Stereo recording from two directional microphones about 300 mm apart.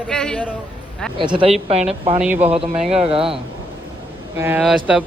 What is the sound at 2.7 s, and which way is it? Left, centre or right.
Speech, centre.